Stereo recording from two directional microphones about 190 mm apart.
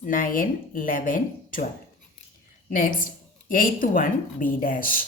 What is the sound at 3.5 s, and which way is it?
A woman's voice, 45° left (ahead or behind).